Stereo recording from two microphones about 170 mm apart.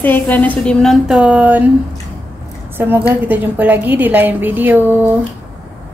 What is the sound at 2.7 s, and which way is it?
A woman's voice, 10° right (ahead or behind).